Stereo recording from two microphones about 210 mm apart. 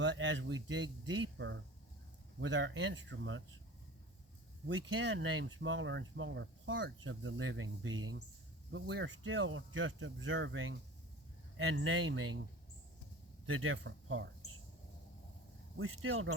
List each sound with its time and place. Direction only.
0.0 s speech: 60° right (ahead or behind)
4.9 s speech: 65° right (ahead or behind)
8.7 s speech: 60° right (ahead or behind)
13.5 s speech: 75° right (ahead or behind)
15.8 s speech: 75° right (ahead or behind)